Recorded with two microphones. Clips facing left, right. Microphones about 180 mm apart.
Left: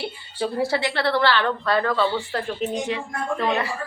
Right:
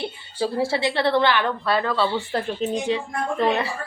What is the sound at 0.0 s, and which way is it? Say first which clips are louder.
A woman's voice: right 1 dB; 25° right (ahead or behind).